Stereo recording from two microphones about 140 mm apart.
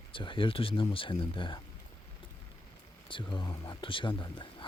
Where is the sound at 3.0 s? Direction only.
35° left (ahead or behind).